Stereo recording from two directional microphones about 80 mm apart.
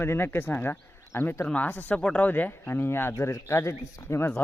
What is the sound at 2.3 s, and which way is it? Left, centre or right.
A man's voice, left.